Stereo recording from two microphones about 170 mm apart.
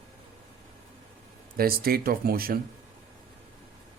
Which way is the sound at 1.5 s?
60° right (ahead or behind).